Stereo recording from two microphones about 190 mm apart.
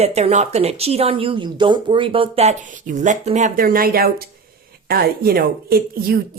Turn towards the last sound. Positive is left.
turn(degrees=-50)  # may be behind; listen again after turning